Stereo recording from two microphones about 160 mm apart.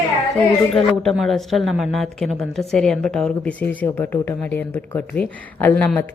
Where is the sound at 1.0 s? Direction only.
Centre (ahead or behind).